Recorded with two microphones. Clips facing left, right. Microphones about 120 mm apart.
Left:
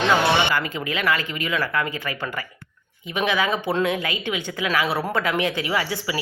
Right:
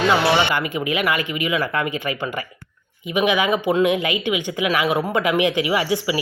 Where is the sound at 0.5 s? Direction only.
15° right (ahead or behind).